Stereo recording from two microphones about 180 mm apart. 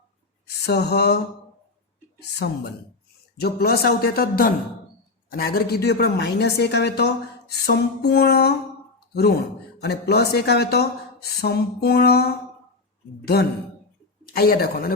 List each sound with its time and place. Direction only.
0.4 s a sound: 65° left (ahead or behind)
2.1 s speech: 65° left (ahead or behind)
9.7 s speech: 65° left (ahead or behind)